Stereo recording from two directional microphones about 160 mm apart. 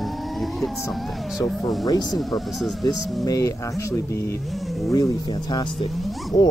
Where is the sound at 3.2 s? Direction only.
20° left (ahead or behind).